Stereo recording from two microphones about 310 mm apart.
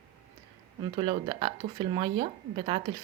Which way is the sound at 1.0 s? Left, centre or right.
Centre.